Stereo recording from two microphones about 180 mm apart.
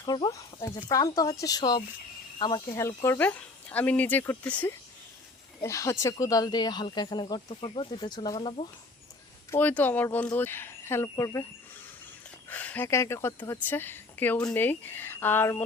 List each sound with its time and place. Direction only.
0.0 s speech: 25° left (ahead or behind)
9.5 s speech: 10° left (ahead or behind)
12.5 s speech: 10° left (ahead or behind)